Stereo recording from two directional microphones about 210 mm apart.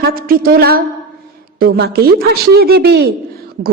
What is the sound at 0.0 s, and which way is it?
Speech, 45° right (ahead or behind).